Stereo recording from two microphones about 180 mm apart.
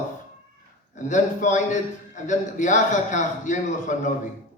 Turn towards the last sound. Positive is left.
turn(degrees=45)  # may be behind; listen again after turning